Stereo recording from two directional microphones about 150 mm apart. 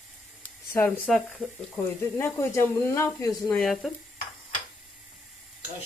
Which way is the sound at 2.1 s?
15° left (ahead or behind).